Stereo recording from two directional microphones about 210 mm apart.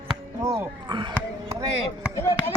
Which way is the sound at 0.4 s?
20° right (ahead or behind).